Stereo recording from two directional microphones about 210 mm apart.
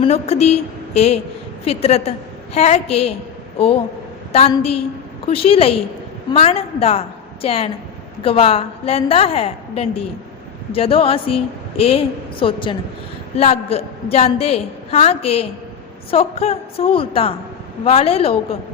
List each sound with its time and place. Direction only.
0.0 s a woman's voice: 30° left (ahead or behind)
4.3 s a woman's voice: 30° left (ahead or behind)